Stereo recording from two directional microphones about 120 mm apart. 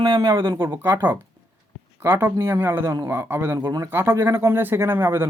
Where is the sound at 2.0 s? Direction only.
20° right (ahead or behind).